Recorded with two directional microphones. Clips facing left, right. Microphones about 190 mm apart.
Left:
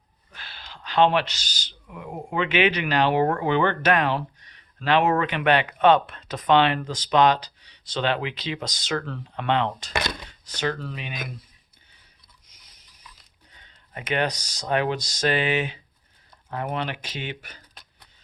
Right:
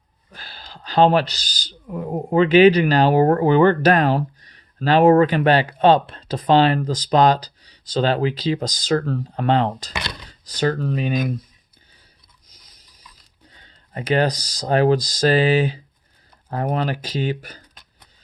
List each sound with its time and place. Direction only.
0.3 s speech: 35° right (ahead or behind)
12.5 s dishes: 35° right (ahead or behind)
13.5 s speech: 35° right (ahead or behind)